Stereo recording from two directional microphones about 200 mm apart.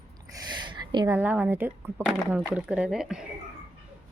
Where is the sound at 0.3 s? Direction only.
20° right (ahead or behind).